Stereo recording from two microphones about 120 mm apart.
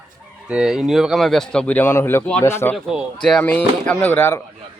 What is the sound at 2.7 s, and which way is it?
Speech, 10° right (ahead or behind).